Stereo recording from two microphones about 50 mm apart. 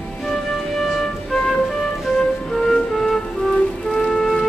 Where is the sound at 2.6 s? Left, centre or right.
Centre.